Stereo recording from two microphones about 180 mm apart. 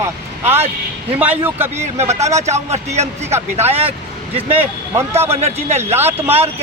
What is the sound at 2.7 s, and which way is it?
Speech, 40° right (ahead or behind).